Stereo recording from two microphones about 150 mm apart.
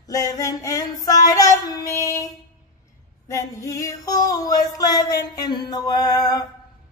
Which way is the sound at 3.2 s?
20° left (ahead or behind).